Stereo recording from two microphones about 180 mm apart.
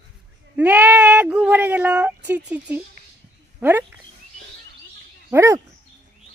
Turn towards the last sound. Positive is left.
turn(degrees=-15)  # may be behind; listen again after turning